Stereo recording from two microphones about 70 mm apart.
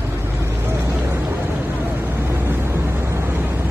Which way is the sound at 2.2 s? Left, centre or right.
Right.